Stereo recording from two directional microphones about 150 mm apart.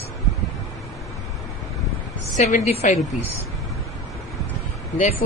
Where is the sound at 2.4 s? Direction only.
55° left (ahead or behind).